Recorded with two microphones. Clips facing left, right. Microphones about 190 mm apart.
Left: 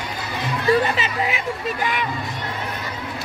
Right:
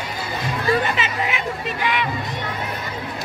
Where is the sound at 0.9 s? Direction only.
35° left (ahead or behind).